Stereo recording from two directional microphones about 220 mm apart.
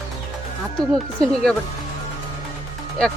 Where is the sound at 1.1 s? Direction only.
Centre (ahead or behind).